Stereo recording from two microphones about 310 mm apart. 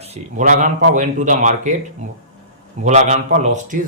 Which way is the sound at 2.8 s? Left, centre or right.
Right.